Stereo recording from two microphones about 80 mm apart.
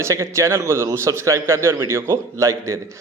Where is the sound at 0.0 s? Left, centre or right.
Right.